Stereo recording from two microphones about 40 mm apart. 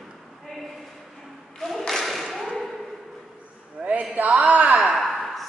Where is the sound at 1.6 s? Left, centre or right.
Centre.